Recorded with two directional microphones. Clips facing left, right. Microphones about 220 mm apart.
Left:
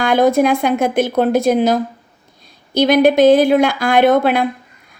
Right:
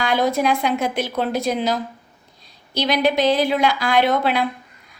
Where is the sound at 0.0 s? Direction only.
50° left (ahead or behind).